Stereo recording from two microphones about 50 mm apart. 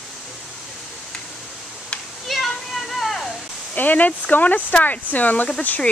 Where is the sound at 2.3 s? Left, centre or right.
Centre.